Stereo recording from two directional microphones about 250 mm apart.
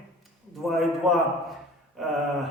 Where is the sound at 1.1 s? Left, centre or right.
Centre.